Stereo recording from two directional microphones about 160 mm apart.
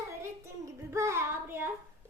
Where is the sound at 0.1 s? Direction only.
15° right (ahead or behind).